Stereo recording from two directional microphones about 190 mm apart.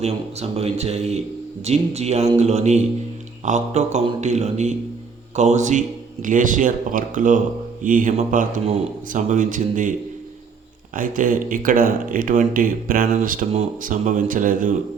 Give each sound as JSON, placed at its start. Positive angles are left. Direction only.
{"t": 0.0, "sound": "mantra", "side_deg": -35}
{"t": 6.2, "sound": "speech", "side_deg": -45}
{"t": 10.9, "sound": "speech", "side_deg": -45}